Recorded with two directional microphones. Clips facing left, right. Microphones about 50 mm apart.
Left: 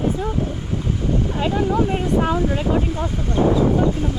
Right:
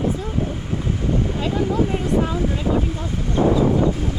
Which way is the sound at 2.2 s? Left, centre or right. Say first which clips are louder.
Left 2 dB; left.